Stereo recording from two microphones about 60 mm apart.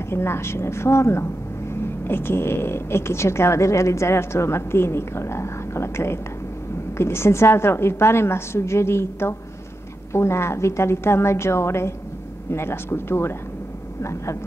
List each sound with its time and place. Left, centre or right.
0.1 s speech: left